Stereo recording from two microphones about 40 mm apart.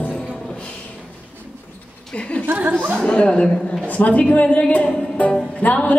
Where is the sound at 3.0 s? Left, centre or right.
Left.